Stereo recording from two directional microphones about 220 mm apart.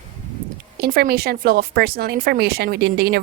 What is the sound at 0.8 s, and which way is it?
A woman's voice, 45° right (ahead or behind).